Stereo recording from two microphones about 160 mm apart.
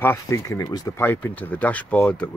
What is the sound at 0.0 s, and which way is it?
Speech, 15° left (ahead or behind).